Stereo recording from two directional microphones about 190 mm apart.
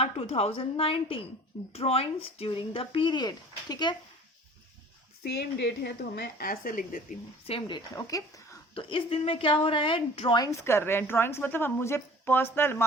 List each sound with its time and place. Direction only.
0.0 s a woman's voice: 30° left (ahead or behind)
5.2 s speech: 60° left (ahead or behind)
7.4 s a woman's voice: 30° left (ahead or behind)
7.9 s a woman's voice: 20° left (ahead or behind)